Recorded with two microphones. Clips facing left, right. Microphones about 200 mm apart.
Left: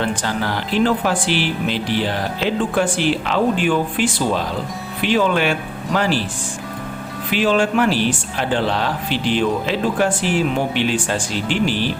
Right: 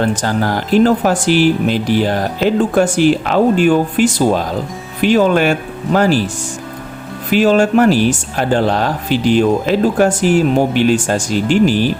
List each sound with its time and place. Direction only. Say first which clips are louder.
0.0 s speech: right 6 dB; 45° right (ahead or behind)
7.3 s speech: right 6 dB; 45° right (ahead or behind)